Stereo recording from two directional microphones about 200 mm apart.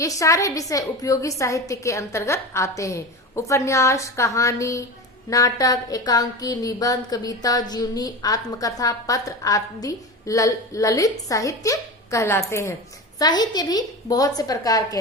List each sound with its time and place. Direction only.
0.0 s a woman's voice: 15° left (ahead or behind)